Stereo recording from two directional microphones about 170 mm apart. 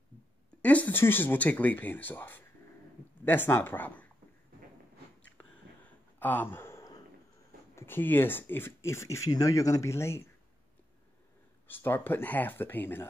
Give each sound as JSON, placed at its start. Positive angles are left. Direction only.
{"t": 0.6, "sound": "speech", "side_deg": 10}
{"t": 6.1, "sound": "a sound", "side_deg": 10}
{"t": 7.7, "sound": "speech", "side_deg": 15}
{"t": 11.6, "sound": "speech", "side_deg": 10}